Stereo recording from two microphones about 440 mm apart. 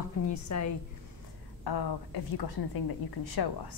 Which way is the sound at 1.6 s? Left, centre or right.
Left.